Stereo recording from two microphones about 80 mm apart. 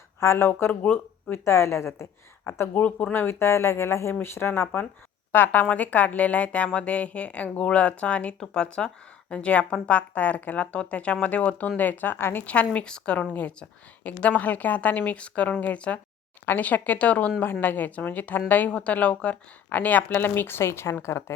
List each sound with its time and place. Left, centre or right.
0.2 s a woman's voice: left